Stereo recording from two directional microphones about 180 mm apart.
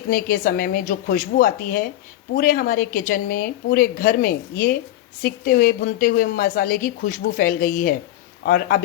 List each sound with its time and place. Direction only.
0.1 s a woman's voice: 50° left (ahead or behind)